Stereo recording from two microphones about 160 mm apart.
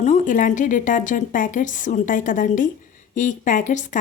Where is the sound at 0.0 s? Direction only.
50° left (ahead or behind).